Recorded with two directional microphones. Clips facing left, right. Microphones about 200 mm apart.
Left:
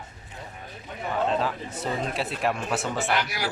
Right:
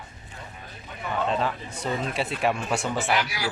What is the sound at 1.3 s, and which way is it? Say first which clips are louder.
Speech: even; centre (ahead or behind).